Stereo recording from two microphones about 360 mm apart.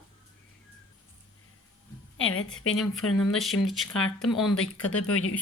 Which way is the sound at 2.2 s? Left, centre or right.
Left.